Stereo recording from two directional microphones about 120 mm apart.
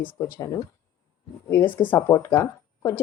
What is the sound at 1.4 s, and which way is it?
Speech, 20° left (ahead or behind).